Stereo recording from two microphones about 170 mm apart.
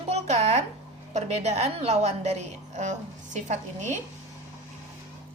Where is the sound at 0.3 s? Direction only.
40° right (ahead or behind).